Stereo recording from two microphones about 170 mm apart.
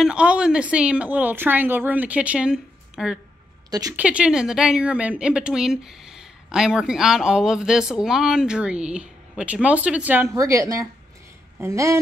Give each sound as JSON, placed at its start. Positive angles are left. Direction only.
{"t": 0.0, "sound": "a woman's voice", "side_deg": -5}